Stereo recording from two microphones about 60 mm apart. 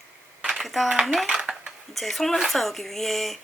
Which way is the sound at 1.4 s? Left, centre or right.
Centre.